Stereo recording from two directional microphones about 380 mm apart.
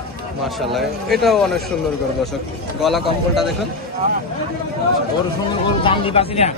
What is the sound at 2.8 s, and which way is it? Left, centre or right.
Speech, centre.